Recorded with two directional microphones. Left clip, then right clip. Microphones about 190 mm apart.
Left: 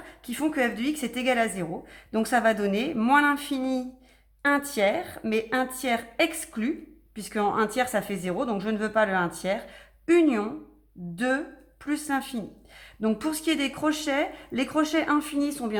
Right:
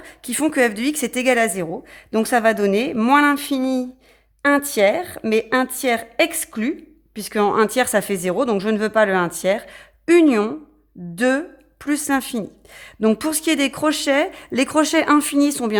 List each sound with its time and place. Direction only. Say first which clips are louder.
0.0 s speech: right 7 dB; 45° right (ahead or behind)